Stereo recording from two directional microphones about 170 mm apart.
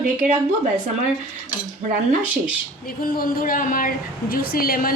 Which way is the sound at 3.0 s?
55° left (ahead or behind).